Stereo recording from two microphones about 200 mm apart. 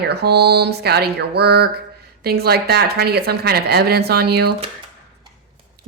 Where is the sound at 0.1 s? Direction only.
55° right (ahead or behind).